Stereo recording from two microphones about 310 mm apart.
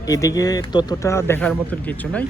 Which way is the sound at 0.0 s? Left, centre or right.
Centre.